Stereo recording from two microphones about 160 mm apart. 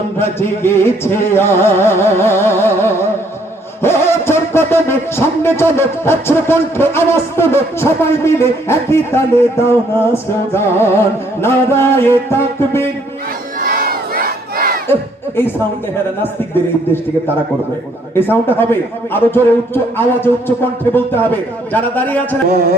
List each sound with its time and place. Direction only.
0.2 s a man's voice: 15° left (ahead or behind)
13.6 s crowd: 65° right (ahead or behind)
18.1 s a man's voice: 15° left (ahead or behind)